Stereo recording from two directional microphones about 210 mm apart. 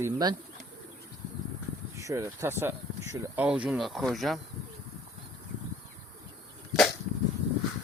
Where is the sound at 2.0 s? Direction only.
15° right (ahead or behind).